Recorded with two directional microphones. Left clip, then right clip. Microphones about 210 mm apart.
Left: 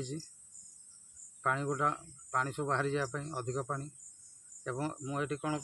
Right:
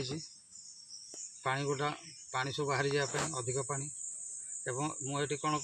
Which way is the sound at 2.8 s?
35° left (ahead or behind).